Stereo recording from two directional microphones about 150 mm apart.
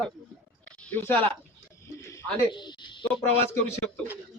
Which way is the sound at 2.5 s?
30° left (ahead or behind).